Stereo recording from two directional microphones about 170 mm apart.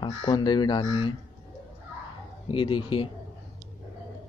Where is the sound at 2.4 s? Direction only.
30° left (ahead or behind).